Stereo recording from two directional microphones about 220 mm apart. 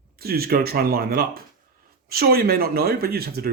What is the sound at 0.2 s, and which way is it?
Speech, 45° right (ahead or behind).